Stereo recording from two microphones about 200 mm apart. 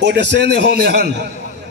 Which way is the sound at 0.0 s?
60° right (ahead or behind).